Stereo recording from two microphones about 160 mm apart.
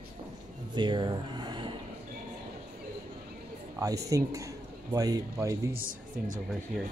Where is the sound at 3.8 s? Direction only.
20° right (ahead or behind).